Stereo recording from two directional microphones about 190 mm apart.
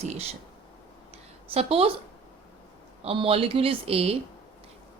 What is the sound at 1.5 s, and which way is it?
Speech, 30° right (ahead or behind).